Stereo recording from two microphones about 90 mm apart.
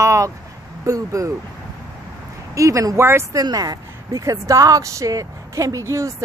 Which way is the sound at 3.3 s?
45° right (ahead or behind).